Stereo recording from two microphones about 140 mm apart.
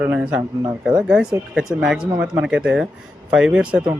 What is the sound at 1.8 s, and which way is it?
Speech, 5° right (ahead or behind).